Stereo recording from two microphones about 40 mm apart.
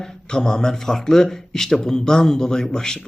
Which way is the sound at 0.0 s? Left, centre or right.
Centre.